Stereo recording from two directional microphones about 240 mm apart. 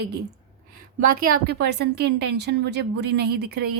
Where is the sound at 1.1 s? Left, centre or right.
Right.